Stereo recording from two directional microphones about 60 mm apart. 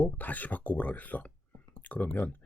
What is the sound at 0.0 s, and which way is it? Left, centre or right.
Speech, left.